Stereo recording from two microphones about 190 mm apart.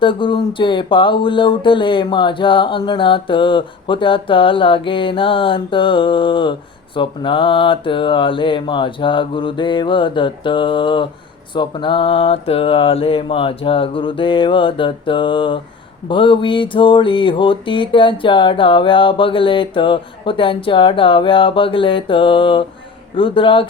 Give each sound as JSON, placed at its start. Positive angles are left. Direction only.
{"t": 0.0, "sound": "speech", "side_deg": 25}